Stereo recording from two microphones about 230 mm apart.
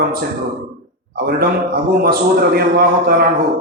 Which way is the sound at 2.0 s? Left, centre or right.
Right.